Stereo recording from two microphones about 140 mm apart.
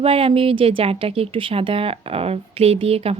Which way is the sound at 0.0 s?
40° right (ahead or behind).